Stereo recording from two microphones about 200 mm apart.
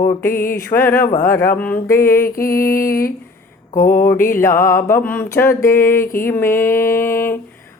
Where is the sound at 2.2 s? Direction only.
45° left (ahead or behind).